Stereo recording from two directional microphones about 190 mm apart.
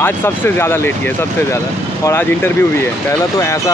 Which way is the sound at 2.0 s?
10° left (ahead or behind).